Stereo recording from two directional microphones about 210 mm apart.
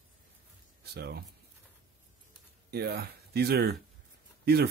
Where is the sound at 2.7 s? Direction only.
50° right (ahead or behind).